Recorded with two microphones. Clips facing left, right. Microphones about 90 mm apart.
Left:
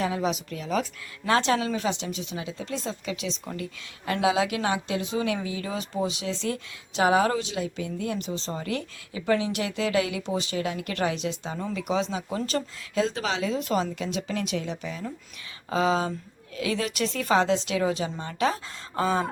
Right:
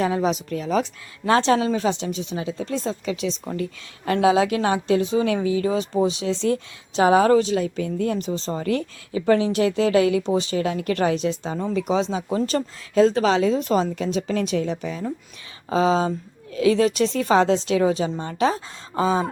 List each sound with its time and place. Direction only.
0.0 s speech: 35° right (ahead or behind)
15.7 s a woman's voice: 30° right (ahead or behind)